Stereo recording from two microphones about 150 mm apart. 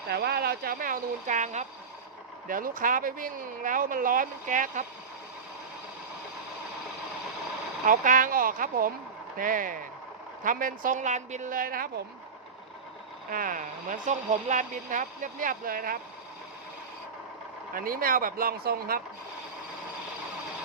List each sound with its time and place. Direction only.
0.2 s speech: 90° right; by 4.9 s 60° right (ahead or behind)
7.9 s speech: 60° right (ahead or behind)
13.3 s speech: 65° right (ahead or behind)
17.7 s speech: 70° right (ahead or behind)